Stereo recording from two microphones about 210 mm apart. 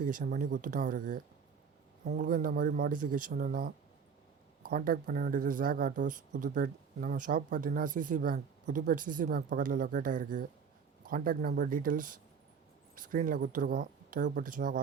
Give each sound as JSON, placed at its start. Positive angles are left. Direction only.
{"t": 0.0, "sound": "speech", "side_deg": -40}